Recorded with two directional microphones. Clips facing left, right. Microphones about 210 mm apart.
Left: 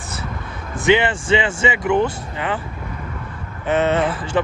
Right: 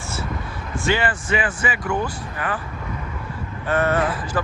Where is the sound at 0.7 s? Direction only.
20° left (ahead or behind).